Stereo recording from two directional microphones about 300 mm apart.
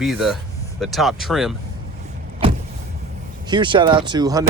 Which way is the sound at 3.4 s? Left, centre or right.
Centre.